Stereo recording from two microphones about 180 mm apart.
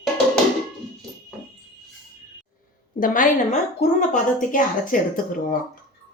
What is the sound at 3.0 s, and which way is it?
A woman's voice, 45° left (ahead or behind).